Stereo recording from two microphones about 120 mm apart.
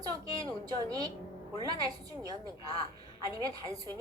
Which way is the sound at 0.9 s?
30° right (ahead or behind).